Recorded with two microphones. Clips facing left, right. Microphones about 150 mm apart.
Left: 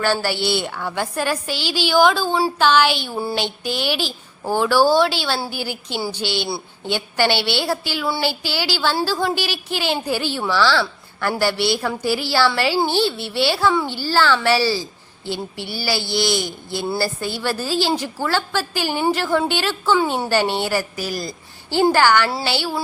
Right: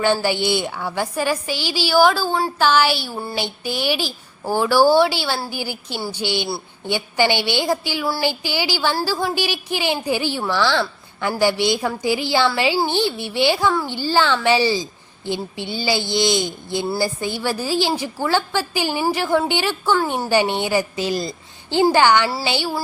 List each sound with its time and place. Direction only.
0.0 s speech: 15° right (ahead or behind)